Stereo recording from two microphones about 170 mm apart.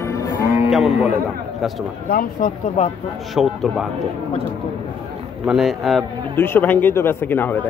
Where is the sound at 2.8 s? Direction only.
40° left (ahead or behind).